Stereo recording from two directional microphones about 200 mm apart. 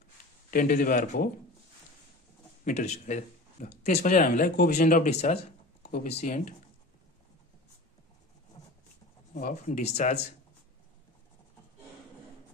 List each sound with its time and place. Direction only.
0.5 s speech: 45° left (ahead or behind)
2.6 s speech: 35° left (ahead or behind)
5.8 s a sound: 50° left (ahead or behind)
6.0 s speech: 35° left (ahead or behind)
9.3 s speech: 35° left (ahead or behind)